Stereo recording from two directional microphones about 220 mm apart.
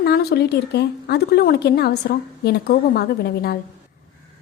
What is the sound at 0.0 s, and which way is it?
A woman's voice, 45° left (ahead or behind).